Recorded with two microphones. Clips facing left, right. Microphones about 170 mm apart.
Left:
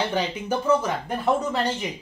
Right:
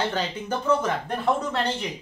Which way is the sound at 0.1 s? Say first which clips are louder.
Left 3 dB; 10° left (ahead or behind).